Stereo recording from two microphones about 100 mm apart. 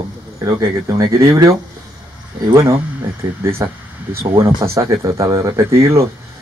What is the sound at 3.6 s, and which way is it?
Speech, 25° right (ahead or behind).